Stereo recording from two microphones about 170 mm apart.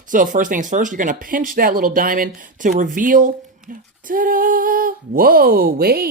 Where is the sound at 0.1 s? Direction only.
50° right (ahead or behind).